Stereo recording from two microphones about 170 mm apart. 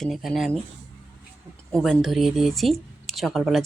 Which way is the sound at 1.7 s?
5° left (ahead or behind).